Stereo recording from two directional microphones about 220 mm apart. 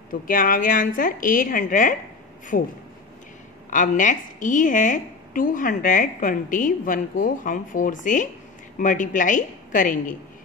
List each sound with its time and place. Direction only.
0.1 s a woman's voice: 40° left (ahead or behind)
3.7 s a woman's voice: 35° left (ahead or behind)